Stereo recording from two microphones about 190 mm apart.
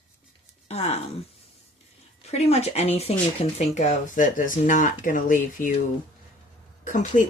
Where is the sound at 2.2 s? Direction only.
35° left (ahead or behind).